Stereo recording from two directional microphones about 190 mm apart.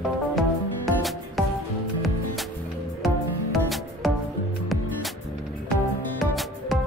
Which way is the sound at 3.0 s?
Centre (ahead or behind).